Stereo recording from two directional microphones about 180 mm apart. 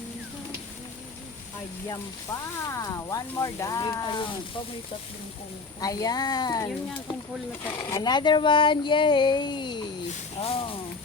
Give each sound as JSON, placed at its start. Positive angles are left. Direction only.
{"t": 2.6, "sound": "speech", "side_deg": 20}
{"t": 5.8, "sound": "speech", "side_deg": 20}